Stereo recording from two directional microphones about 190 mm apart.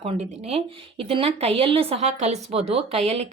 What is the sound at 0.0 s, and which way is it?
Speech, 35° right (ahead or behind).